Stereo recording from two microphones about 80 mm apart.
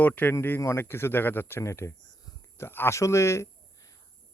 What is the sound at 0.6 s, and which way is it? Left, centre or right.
Speech, left.